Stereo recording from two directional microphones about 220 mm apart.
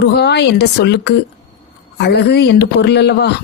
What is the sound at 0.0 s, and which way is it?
Speech, 50° left (ahead or behind).